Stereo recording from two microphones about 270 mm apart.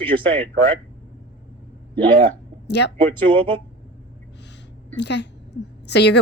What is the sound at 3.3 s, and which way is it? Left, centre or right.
Speech, centre.